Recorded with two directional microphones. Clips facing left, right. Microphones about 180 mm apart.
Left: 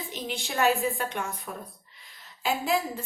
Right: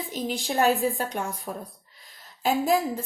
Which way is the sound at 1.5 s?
25° right (ahead or behind).